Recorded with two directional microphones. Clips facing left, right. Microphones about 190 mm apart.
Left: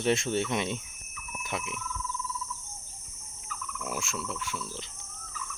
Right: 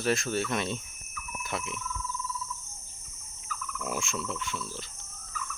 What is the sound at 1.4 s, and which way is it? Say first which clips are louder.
Cricket: even; 15° left (ahead or behind).